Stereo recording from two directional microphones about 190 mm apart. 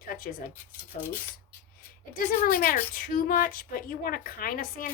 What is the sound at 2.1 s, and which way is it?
A woman's voice, 50° left (ahead or behind).